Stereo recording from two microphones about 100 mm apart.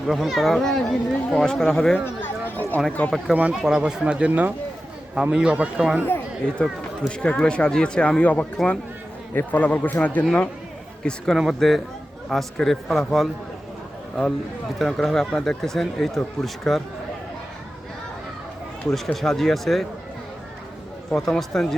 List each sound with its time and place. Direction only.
0.1 s speech: centre (ahead or behind)
2.0 s speech: 20° left (ahead or behind)
3.5 s speech: centre (ahead or behind)
7.1 s speech: 10° left (ahead or behind)
14.8 s speech: centre (ahead or behind)
18.9 s speech: centre (ahead or behind)
21.1 s speech: 5° left (ahead or behind)